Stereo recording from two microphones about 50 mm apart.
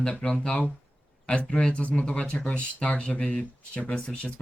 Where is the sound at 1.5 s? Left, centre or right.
Centre.